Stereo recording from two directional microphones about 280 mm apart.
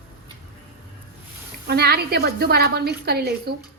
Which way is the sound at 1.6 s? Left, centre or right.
Right.